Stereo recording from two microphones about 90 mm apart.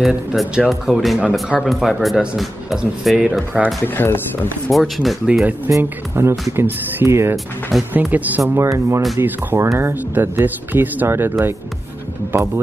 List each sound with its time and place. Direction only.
0.0 s speech: 5° right (ahead or behind)
3.8 s speech: 25° left (ahead or behind)
4.6 s speech: centre (ahead or behind)
5.8 s speech: 30° right (ahead or behind)
8.4 s speech: 35° right (ahead or behind)
9.2 s speech: 25° right (ahead or behind)